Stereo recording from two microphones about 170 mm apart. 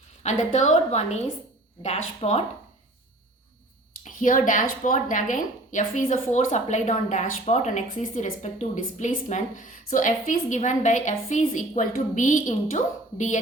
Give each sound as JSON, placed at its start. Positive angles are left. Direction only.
{"t": 0.2, "sound": "a woman's voice", "side_deg": 45}
{"t": 4.0, "sound": "a woman's voice", "side_deg": 50}